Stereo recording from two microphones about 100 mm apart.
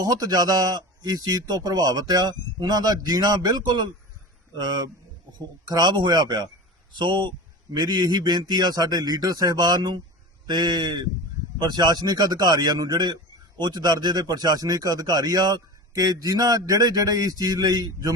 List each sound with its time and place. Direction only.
0.0 s speech: 40° right (ahead or behind)